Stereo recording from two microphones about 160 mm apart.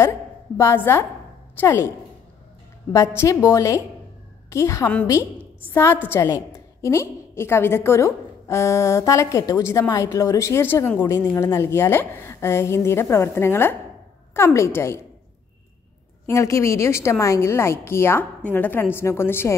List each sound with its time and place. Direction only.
0.6 s a woman's voice: 15° left (ahead or behind)
2.9 s a woman's voice: 15° left (ahead or behind)
16.3 s a woman's voice: 20° left (ahead or behind)